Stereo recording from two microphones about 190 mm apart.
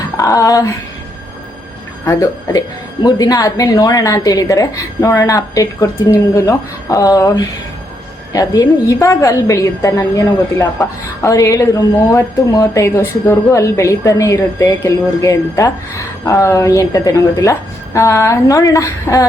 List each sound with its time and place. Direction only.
0.2 s a woman's voice: 20° left (ahead or behind)
2.0 s a woman's voice: 15° left (ahead or behind)